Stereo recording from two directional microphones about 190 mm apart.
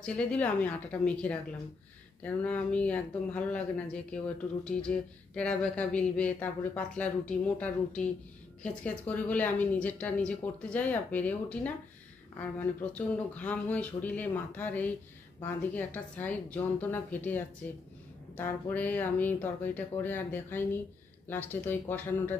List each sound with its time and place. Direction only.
0.0 s speech: 5° left (ahead or behind)